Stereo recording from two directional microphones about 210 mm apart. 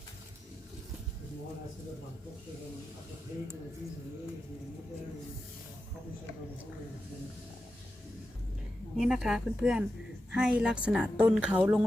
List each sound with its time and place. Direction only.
9.0 s speech: 5° right (ahead or behind)